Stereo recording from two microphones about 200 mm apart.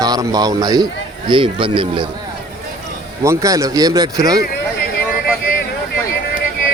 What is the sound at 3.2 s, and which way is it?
Speech, 15° right (ahead or behind).